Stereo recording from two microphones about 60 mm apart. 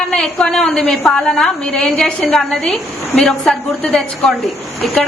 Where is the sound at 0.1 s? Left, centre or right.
Centre.